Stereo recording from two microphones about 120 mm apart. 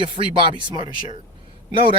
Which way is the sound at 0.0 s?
45° right (ahead or behind).